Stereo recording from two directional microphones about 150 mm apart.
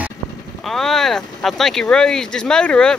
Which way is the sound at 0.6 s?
Centre (ahead or behind).